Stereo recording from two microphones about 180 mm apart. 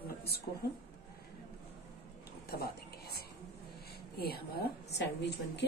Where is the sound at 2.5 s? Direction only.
60° left (ahead or behind).